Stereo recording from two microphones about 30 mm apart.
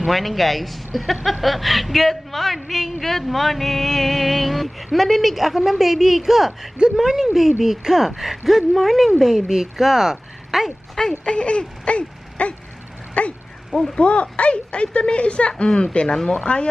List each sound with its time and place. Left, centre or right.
0.0 s speech: centre
11.3 s a sound: left
13.2 s speech: left
16.1 s speech: centre
16.4 s speech: left